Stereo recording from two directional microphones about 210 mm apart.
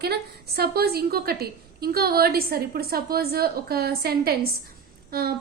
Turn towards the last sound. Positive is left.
turn(degrees=-45)  # may be behind; listen again after turning